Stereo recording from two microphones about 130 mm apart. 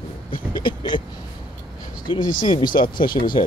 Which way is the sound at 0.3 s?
40° left (ahead or behind).